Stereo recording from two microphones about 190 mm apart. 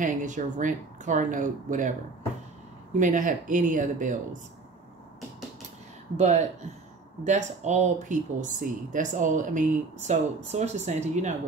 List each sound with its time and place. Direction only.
0.0 s speech: 40° right (ahead or behind)
3.0 s speech: 45° right (ahead or behind)
6.1 s speech: 40° right (ahead or behind)